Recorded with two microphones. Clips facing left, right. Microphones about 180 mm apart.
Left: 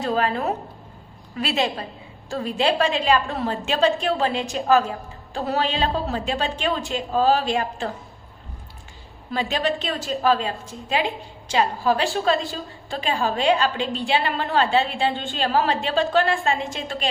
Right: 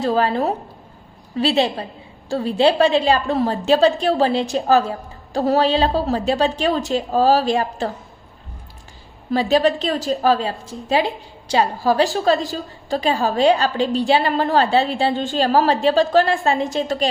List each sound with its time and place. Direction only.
0.0 s a woman's voice: 35° right (ahead or behind)
9.3 s a woman's voice: 35° right (ahead or behind)